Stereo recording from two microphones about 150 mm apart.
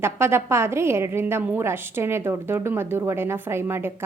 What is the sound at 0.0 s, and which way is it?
A woman's voice, 15° right (ahead or behind).